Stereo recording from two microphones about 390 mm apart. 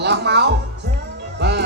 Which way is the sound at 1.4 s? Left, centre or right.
Right.